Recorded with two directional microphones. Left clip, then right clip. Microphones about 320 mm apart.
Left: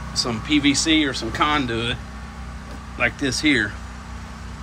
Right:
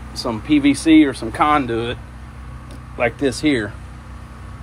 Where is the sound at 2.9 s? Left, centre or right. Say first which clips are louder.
Right 3 dB; centre.